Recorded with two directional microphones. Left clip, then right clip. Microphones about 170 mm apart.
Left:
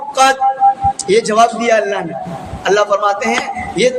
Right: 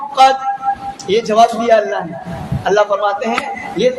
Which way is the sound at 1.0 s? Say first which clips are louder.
Right 1 dB; 25° left (ahead or behind).